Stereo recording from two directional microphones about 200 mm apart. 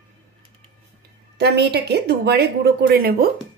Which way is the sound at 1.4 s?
55° right (ahead or behind).